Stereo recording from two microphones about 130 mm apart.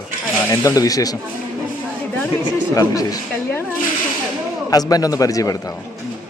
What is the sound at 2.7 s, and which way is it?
Speech, 30° left (ahead or behind).